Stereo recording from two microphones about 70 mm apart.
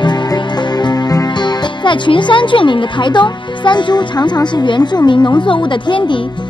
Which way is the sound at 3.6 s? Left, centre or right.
Left.